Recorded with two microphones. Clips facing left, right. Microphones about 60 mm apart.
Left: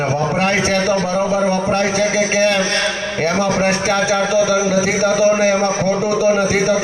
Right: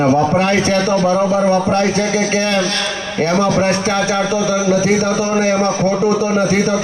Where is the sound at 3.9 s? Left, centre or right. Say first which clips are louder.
Left 1 dB; centre.